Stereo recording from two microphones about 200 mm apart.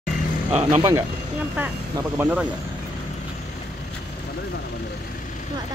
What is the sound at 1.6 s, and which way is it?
Speech, 10° right (ahead or behind).